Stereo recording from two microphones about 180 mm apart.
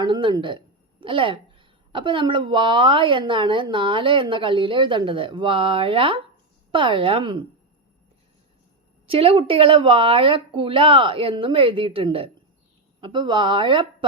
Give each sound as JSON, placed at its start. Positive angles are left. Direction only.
{"t": 0.0, "sound": "speech", "side_deg": -25}
{"t": 9.0, "sound": "speech", "side_deg": -30}